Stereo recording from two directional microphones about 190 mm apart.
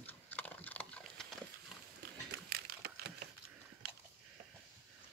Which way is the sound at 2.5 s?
50° right (ahead or behind).